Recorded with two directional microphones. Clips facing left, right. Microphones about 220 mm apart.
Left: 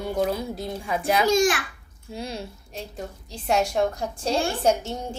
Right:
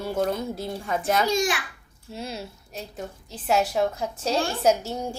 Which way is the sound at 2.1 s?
Centre (ahead or behind).